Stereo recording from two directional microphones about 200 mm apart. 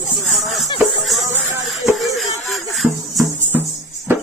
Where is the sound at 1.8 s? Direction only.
Centre (ahead or behind).